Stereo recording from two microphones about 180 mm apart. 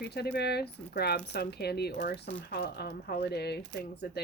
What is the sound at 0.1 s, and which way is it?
Speech, 65° left (ahead or behind).